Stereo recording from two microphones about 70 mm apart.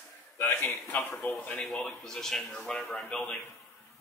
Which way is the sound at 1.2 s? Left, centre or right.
Left.